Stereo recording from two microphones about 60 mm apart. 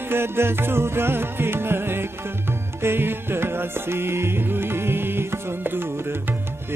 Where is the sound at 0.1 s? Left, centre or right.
Right.